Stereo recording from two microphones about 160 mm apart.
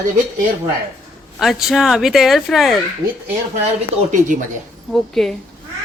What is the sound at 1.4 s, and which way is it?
Speech, centre (ahead or behind).